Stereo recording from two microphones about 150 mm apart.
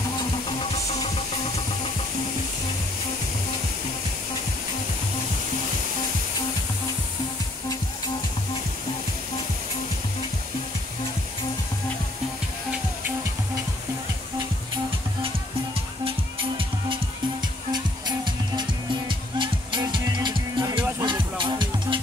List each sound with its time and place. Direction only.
15.2 s music: 40° right (ahead or behind)